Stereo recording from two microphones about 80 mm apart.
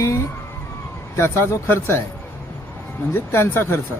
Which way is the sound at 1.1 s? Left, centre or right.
Left.